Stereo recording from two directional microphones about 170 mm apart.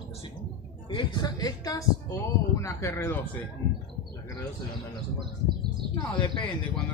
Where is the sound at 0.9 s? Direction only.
25° left (ahead or behind).